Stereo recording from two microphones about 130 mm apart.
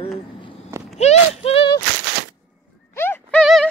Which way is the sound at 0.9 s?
55° left (ahead or behind).